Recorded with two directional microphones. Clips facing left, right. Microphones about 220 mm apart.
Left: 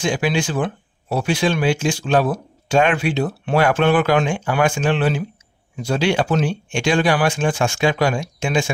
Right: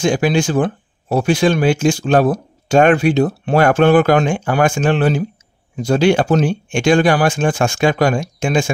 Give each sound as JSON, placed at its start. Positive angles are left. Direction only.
{"t": 0.0, "sound": "speech", "side_deg": -45}